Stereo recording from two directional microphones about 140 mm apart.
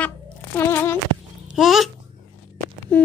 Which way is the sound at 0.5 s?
15° left (ahead or behind).